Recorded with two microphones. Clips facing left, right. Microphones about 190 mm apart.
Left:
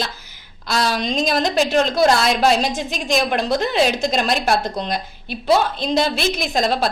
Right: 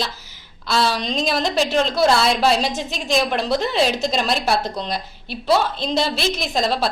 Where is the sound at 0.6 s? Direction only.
45° left (ahead or behind).